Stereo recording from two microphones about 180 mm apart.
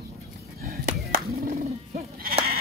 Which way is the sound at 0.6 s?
50° right (ahead or behind).